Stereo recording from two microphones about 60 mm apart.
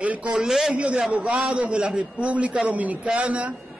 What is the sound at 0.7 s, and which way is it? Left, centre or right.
A man's voice, right.